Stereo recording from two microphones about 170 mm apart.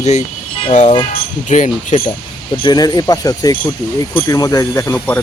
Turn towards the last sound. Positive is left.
turn(degrees=15)  # may be behind; listen again after turning